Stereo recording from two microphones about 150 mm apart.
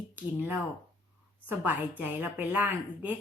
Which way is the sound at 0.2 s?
15° right (ahead or behind).